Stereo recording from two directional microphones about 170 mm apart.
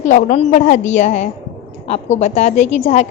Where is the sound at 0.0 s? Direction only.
50° left (ahead or behind).